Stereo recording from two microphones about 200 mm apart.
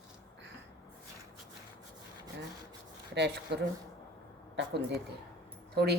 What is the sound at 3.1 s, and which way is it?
A woman's voice, 60° right (ahead or behind).